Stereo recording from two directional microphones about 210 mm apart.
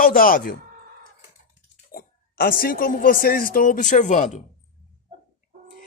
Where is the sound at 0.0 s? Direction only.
40° left (ahead or behind).